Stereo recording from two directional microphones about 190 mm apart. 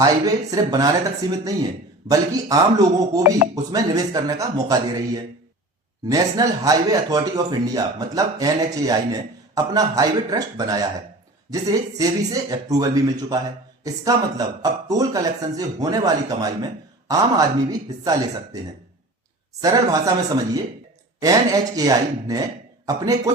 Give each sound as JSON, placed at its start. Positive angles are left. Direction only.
{"t": 0.0, "sound": "speech", "side_deg": -20}
{"t": 2.0, "sound": "speech", "side_deg": -20}
{"t": 19.6, "sound": "speech", "side_deg": -20}